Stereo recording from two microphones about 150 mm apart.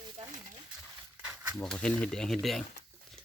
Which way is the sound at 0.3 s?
55° right (ahead or behind).